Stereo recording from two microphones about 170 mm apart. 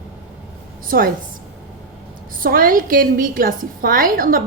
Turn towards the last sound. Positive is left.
turn(degrees=-55)  # may be behind; listen again after turning